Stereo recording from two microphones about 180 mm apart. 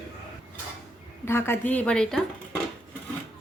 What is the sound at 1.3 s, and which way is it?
Speech, 10° left (ahead or behind).